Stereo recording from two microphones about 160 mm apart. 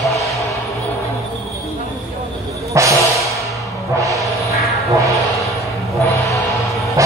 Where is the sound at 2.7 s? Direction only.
20° right (ahead or behind).